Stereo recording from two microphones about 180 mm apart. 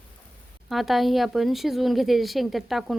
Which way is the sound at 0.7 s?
Centre (ahead or behind).